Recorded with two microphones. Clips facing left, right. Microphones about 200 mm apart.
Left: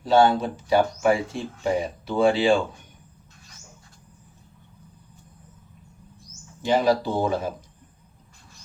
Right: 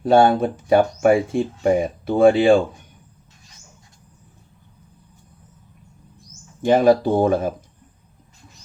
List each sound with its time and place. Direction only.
0.0 s speech: 55° right (ahead or behind)
6.6 s speech: 50° right (ahead or behind)